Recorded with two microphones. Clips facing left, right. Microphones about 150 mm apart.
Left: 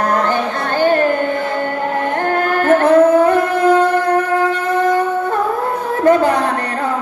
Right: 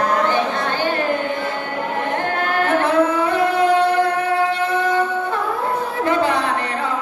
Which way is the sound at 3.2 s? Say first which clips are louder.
Left 4 dB; 45° left (ahead or behind).